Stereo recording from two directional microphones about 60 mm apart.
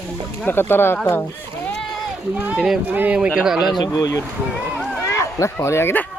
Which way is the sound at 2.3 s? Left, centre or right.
Right.